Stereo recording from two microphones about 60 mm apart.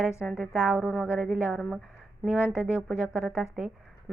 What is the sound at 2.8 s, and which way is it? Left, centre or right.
Speech, centre.